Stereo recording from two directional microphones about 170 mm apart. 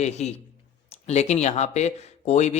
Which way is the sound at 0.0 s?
40° left (ahead or behind).